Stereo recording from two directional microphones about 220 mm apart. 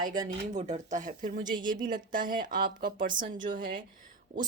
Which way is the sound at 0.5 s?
30° right (ahead or behind).